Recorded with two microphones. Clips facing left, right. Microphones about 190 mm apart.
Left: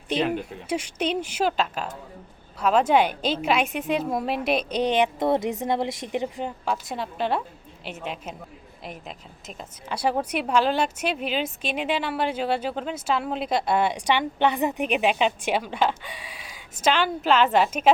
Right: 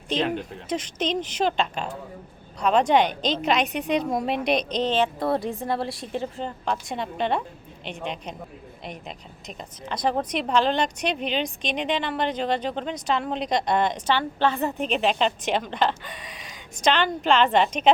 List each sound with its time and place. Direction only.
0.1 s a woman's voice: 5° left (ahead or behind)